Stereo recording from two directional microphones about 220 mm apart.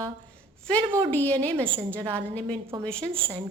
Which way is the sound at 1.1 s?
10° left (ahead or behind).